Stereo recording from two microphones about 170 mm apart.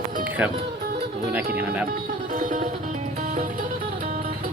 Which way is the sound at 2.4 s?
50° right (ahead or behind).